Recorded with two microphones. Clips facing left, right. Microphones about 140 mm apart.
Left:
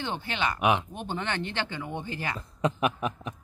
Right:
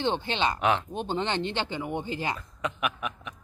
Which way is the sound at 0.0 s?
25° right (ahead or behind).